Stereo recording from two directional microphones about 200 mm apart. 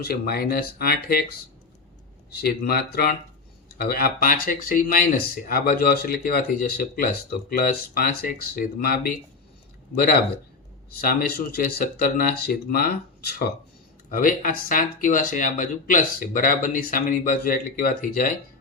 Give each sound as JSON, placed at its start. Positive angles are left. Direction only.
{"t": 0.0, "sound": "speech", "side_deg": 50}
{"t": 2.3, "sound": "speech", "side_deg": 50}